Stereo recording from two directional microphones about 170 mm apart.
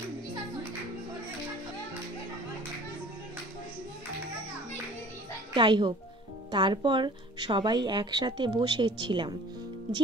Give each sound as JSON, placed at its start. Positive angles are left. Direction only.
{"t": 5.5, "sound": "speech", "side_deg": -30}